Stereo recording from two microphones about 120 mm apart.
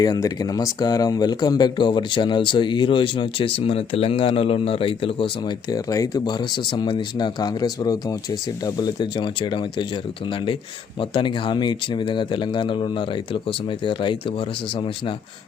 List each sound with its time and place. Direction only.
0.0 s speech: 35° left (ahead or behind); by 15.1 s 50° left (ahead or behind)